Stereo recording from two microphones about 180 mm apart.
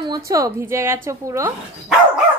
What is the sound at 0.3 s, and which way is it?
A woman's voice, 15° right (ahead or behind).